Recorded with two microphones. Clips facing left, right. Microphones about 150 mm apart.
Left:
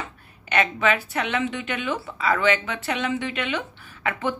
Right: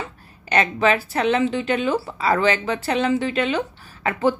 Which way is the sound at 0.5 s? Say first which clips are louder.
Right 3 dB; 35° right (ahead or behind).